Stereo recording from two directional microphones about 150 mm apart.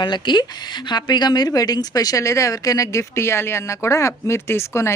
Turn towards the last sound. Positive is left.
turn(degrees=20)  # may be behind; listen again after turning